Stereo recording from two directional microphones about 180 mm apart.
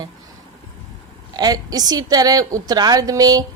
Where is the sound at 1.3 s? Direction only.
20° right (ahead or behind).